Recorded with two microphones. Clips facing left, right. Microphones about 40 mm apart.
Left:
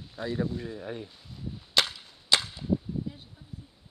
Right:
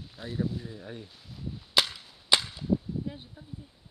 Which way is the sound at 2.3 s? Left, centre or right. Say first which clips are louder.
Even; centre.